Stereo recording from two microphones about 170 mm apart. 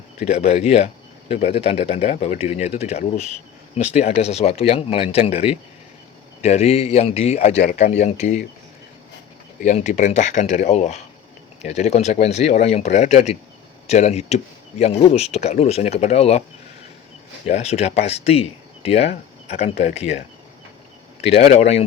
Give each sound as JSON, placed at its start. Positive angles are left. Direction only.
{"t": 0.3, "sound": "speech", "side_deg": 40}
{"t": 9.6, "sound": "speech", "side_deg": 45}
{"t": 17.4, "sound": "speech", "side_deg": 40}
{"t": 21.3, "sound": "speech", "side_deg": 40}